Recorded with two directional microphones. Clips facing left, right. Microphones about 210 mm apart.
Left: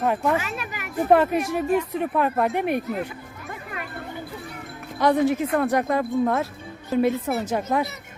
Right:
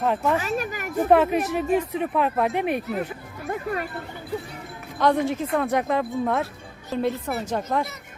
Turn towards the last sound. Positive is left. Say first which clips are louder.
# left 2 dB
turn(degrees=5)  # may be behind; listen again after turning